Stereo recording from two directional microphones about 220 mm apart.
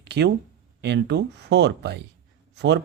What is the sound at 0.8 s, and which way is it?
Speech, 50° right (ahead or behind).